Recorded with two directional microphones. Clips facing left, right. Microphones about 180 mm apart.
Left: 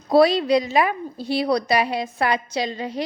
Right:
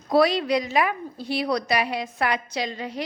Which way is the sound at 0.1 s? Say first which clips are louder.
Left 4 dB; 30° left (ahead or behind).